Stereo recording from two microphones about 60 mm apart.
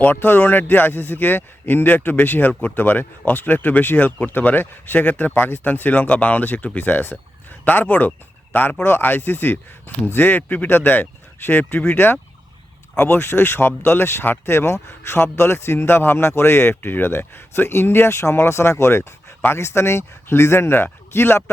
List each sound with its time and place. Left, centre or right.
0.0 s a man's voice: left